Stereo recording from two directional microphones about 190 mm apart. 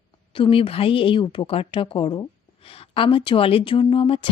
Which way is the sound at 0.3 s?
30° left (ahead or behind).